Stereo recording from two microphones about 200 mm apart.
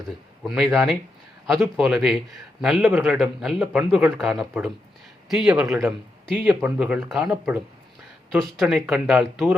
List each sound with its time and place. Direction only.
0.4 s speech: centre (ahead or behind)